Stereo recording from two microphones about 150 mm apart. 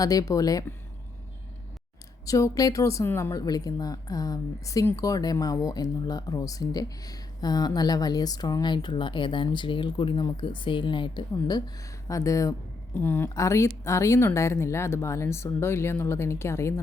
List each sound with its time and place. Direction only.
0.0 s speech: 25° left (ahead or behind)
2.2 s speech: 20° left (ahead or behind)